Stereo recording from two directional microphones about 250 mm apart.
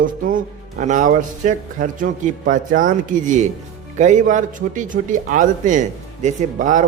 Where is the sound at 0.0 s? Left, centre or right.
Right.